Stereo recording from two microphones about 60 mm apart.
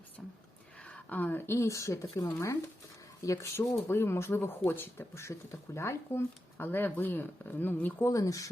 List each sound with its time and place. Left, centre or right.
0.8 s a sound: left
1.5 s speech: left
3.2 s speech: left
3.8 s speech: left
5.1 s speech: left
8.0 s speech: left